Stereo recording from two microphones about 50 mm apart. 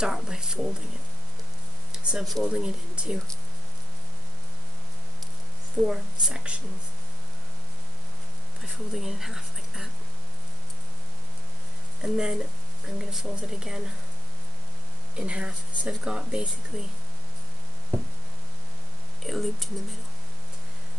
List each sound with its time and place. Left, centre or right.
0.0 s speech: centre
1.9 s a sound: centre
2.4 s speech: centre
5.8 s speech: centre
8.6 s speech: centre
12.0 s speech: centre
15.1 s speech: right
15.9 s speech: centre
19.2 s speech: centre